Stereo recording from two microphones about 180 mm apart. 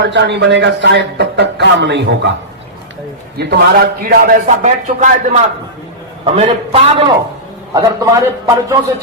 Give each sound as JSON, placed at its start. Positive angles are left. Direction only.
{"t": 0.0, "sound": "a man's voice", "side_deg": -75}
{"t": 3.3, "sound": "a man's voice", "side_deg": -65}
{"t": 7.7, "sound": "a man's voice", "side_deg": -20}